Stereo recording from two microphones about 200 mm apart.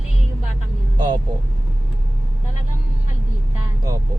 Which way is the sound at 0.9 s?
20° right (ahead or behind).